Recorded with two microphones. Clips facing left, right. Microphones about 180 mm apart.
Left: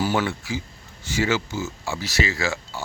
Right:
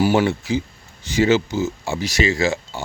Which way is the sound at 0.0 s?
15° right (ahead or behind).